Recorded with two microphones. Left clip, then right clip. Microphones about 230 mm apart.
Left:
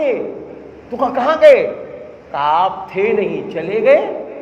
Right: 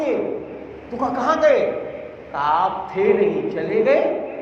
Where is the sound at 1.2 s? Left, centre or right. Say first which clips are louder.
Left 4 dB; left.